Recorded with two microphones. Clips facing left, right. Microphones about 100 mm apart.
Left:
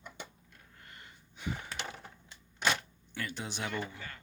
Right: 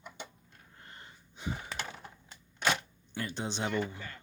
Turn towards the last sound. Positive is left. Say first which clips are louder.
# right 4 dB
turn(degrees=-25)  # may be behind; listen again after turning